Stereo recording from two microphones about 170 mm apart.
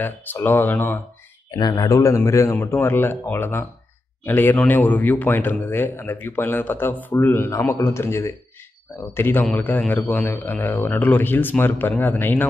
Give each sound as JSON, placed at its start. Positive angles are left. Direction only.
{"t": 0.0, "sound": "speech", "side_deg": 10}
{"t": 1.5, "sound": "speech", "side_deg": 25}